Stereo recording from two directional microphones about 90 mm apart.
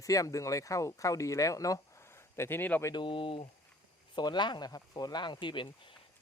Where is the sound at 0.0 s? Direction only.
40° left (ahead or behind); by 2.8 s 20° left (ahead or behind).